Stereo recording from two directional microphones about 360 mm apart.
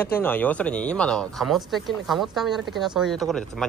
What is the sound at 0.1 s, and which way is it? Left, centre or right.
A man's voice, centre.